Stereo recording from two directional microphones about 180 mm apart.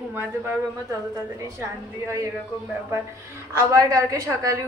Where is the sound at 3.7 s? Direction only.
20° right (ahead or behind).